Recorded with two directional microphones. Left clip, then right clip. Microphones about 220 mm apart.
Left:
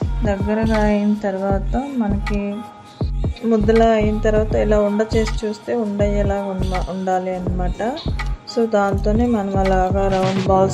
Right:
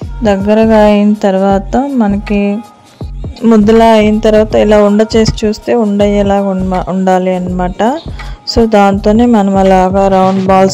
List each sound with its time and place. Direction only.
0.2 s speech: 40° right (ahead or behind)
3.4 s speech: 45° right (ahead or behind)
10.2 s music: centre (ahead or behind)